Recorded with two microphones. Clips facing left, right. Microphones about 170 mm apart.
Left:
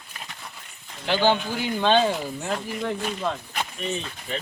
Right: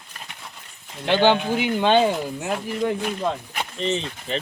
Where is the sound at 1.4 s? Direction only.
15° right (ahead or behind).